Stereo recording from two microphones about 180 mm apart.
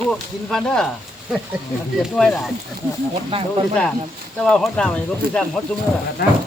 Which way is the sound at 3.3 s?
30° right (ahead or behind).